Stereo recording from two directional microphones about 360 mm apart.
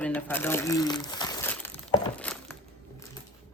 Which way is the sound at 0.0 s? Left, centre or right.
Centre.